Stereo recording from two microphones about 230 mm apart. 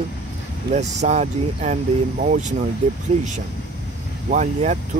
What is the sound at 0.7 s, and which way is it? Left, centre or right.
Speech, right.